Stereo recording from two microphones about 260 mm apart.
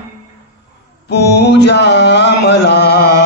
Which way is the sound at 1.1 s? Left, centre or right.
Left.